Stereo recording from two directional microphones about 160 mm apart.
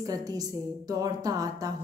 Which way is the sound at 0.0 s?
25° right (ahead or behind).